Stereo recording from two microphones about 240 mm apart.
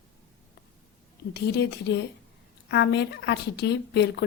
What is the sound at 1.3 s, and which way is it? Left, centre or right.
Speech, left.